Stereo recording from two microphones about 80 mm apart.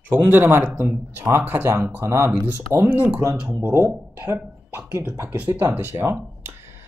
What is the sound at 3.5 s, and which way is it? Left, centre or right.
Speech, right.